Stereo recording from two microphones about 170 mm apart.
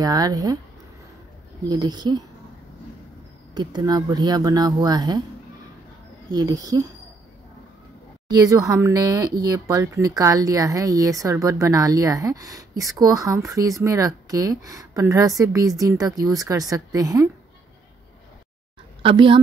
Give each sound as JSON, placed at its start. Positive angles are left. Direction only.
{"t": 0.0, "sound": "speech", "side_deg": -20}
{"t": 1.7, "sound": "speech", "side_deg": -25}
{"t": 3.5, "sound": "speech", "side_deg": -25}
{"t": 6.3, "sound": "speech", "side_deg": -20}
{"t": 8.3, "sound": "speech", "side_deg": -20}
{"t": 19.0, "sound": "speech", "side_deg": -30}